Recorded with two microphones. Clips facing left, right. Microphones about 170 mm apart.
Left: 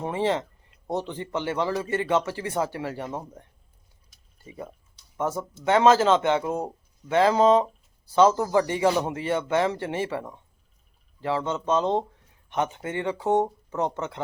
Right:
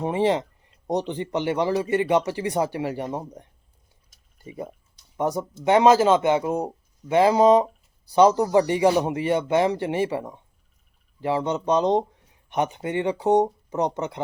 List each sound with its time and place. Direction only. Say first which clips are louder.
0.0 s speech: right 4 dB; 15° right (ahead or behind)
4.4 s speech: right 4 dB; 20° right (ahead or behind)